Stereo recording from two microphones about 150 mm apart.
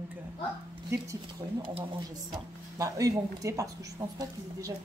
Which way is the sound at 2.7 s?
20° right (ahead or behind).